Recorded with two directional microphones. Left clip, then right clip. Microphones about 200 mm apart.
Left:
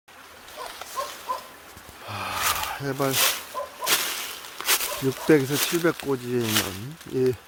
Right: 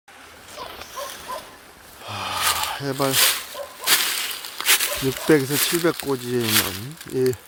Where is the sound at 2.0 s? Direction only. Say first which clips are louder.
Right 3 dB; 5° left (ahead or behind).